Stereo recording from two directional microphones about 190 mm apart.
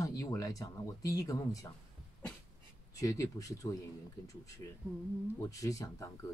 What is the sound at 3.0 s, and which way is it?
Speech, 15° left (ahead or behind).